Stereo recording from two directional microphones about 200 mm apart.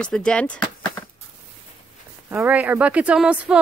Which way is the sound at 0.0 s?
5° left (ahead or behind).